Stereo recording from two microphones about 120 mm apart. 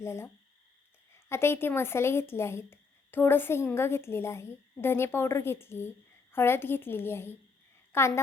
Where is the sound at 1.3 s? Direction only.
20° left (ahead or behind).